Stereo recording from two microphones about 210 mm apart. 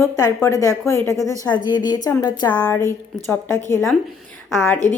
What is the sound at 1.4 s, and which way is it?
A woman's voice, 20° left (ahead or behind).